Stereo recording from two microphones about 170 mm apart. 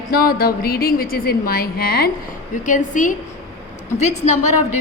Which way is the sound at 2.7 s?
50° left (ahead or behind).